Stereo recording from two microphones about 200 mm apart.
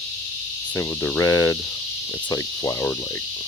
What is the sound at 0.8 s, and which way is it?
Cricket, 10° left (ahead or behind).